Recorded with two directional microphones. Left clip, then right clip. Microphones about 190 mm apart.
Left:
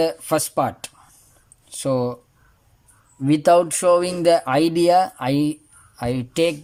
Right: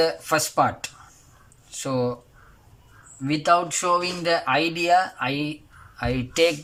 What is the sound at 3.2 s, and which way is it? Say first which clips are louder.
Speech: left 5 dB; 35° left (ahead or behind).